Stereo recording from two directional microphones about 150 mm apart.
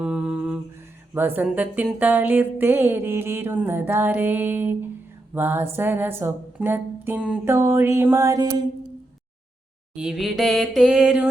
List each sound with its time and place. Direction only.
0.0 s humming: 5° right (ahead or behind)
1.1 s music: 10° right (ahead or behind)
9.9 s mantra: 5° right (ahead or behind)